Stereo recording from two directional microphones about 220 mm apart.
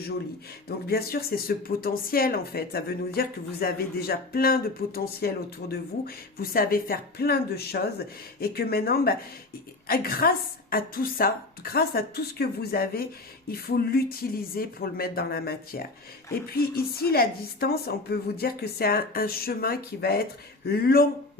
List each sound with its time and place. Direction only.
0.9 s speech: 45° left (ahead or behind)